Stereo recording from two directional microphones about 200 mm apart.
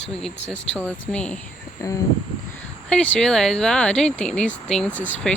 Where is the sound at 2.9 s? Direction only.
5° left (ahead or behind).